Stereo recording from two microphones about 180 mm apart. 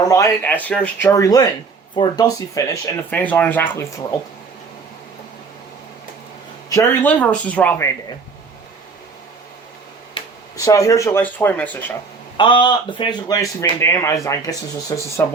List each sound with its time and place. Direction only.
0.0 s speech: 15° left (ahead or behind)
6.7 s speech: 15° left (ahead or behind)
10.2 s a sound: 30° left (ahead or behind)
10.6 s speech: 20° left (ahead or behind)
12.4 s a man's voice: 25° left (ahead or behind)